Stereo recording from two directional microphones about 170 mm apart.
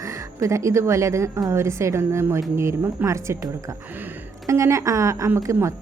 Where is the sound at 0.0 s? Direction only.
20° right (ahead or behind).